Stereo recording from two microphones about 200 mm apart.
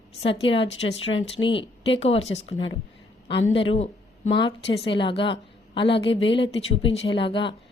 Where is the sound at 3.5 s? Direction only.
30° left (ahead or behind).